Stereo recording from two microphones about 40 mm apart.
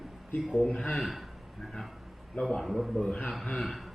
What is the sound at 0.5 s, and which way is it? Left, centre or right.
Speech, left.